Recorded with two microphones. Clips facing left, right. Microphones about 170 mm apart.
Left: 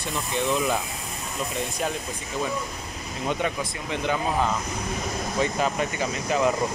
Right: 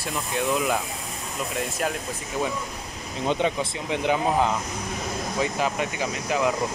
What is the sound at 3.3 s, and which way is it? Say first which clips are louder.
Speech: right 3 dB; 25° right (ahead or behind).